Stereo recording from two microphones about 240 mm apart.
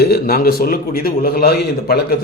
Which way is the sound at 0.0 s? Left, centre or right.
Left.